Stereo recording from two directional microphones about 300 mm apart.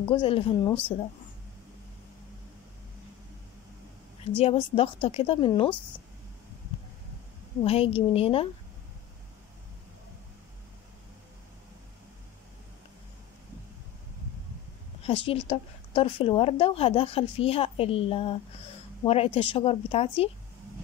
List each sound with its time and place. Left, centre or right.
0.0 s a woman's voice: centre
4.4 s a woman's voice: centre
7.6 s speech: centre
15.0 s speech: centre